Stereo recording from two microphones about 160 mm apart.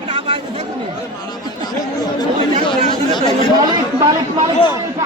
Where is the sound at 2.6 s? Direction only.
30° left (ahead or behind).